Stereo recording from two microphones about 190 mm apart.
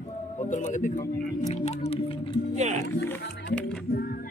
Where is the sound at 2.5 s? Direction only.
35° right (ahead or behind).